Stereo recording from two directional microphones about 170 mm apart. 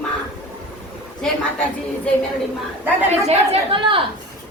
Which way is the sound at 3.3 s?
30° right (ahead or behind).